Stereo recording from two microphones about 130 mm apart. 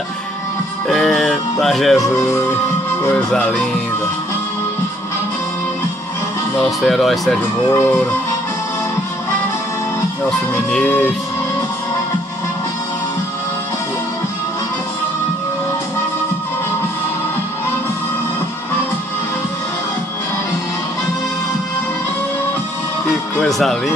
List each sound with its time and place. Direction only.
0.8 s music: centre (ahead or behind)
6.8 s speech: centre (ahead or behind)
7.7 s music: 15° left (ahead or behind)
10.5 s music: 15° left (ahead or behind)
23.3 s speech: 5° left (ahead or behind)